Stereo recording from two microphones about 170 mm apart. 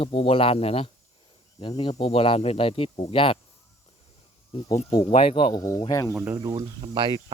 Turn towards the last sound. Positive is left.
turn(degrees=-30)  # may be behind; listen again after turning